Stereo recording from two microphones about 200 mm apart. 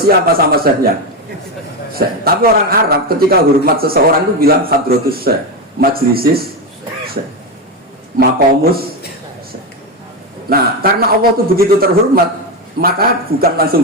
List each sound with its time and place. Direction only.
0.0 s a man's voice: 50° right (ahead or behind)
1.9 s a man's voice: 50° right (ahead or behind)
8.2 s a man's voice: 50° right (ahead or behind)
10.5 s a man's voice: 50° right (ahead or behind)